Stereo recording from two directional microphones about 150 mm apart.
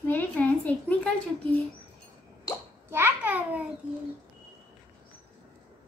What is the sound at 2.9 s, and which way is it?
Speech, 15° right (ahead or behind).